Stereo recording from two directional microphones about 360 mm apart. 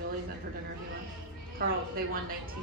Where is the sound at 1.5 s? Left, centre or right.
Right.